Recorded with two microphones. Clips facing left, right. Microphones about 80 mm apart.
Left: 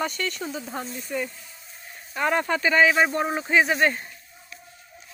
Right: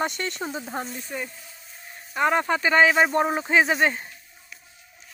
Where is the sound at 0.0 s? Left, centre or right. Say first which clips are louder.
Right 1 dB; right.